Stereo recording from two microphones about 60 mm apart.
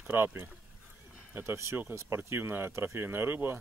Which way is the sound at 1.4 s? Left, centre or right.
Right.